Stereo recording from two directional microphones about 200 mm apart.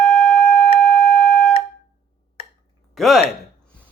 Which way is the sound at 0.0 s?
Centre (ahead or behind).